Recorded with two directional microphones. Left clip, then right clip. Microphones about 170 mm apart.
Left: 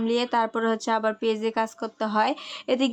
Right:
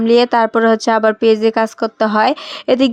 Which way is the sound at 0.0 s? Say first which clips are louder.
Right 12 dB; 40° right (ahead or behind).